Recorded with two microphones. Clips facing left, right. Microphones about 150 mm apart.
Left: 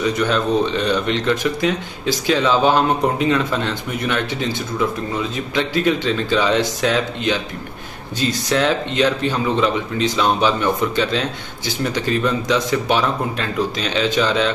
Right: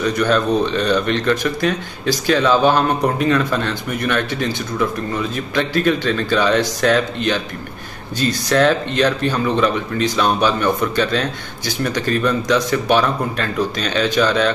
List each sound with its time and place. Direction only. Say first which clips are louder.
0.0 s speech: right 2 dB; 20° left (ahead or behind)
8.5 s speech: right 4 dB; 15° left (ahead or behind)